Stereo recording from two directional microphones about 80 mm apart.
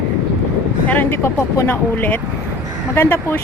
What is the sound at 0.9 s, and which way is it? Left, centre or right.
Speech, left.